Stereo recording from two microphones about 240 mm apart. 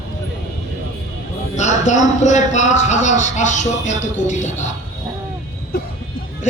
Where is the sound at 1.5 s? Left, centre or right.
Left.